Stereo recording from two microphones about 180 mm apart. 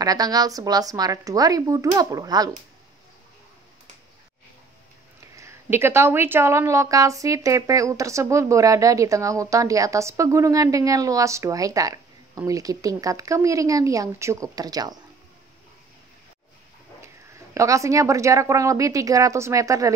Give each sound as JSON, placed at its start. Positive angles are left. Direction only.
{"t": 0.0, "sound": "a woman's voice", "side_deg": -20}
{"t": 5.3, "sound": "speech", "side_deg": -15}
{"t": 17.0, "sound": "speech", "side_deg": -15}